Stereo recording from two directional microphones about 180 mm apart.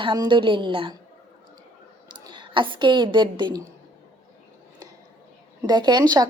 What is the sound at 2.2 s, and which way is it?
A woman's voice, 25° right (ahead or behind).